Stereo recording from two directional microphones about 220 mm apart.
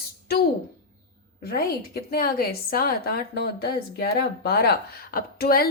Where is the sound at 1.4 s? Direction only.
45° left (ahead or behind).